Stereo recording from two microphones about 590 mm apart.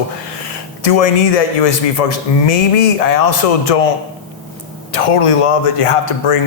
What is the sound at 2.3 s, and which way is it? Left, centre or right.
Speech, left.